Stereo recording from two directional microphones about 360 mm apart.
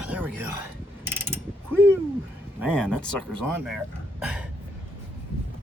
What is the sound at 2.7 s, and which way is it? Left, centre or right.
Speech, centre.